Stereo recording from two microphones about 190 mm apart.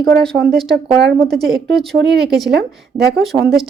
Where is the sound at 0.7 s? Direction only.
60° right (ahead or behind).